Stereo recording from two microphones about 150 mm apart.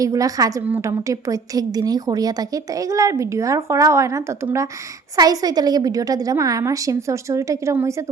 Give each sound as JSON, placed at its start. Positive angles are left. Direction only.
{"t": 0.0, "sound": "a woman's voice", "side_deg": -25}